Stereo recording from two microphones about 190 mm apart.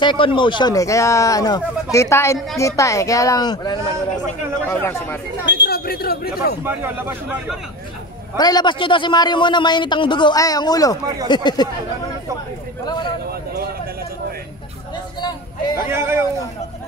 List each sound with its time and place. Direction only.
0.0 s speech: 25° left (ahead or behind)
4.6 s speech: 10° left (ahead or behind)
5.5 s a sound: 55° left (ahead or behind)
6.6 s speech: 10° right (ahead or behind)
8.4 s a man's voice: 20° left (ahead or behind)
15.9 s speech: 15° right (ahead or behind)